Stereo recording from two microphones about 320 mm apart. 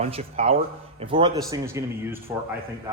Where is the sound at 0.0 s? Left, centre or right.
Centre.